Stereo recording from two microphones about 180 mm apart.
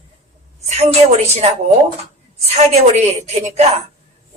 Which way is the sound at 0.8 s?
35° right (ahead or behind).